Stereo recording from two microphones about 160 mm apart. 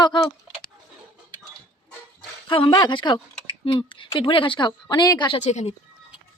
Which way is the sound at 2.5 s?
30° left (ahead or behind).